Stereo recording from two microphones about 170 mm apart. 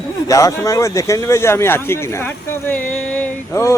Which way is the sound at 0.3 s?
20° left (ahead or behind).